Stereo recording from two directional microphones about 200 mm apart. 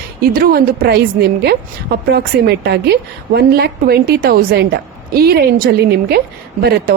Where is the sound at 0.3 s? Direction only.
50° right (ahead or behind).